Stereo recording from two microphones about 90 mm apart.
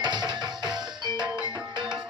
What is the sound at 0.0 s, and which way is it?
Music, 55° right (ahead or behind).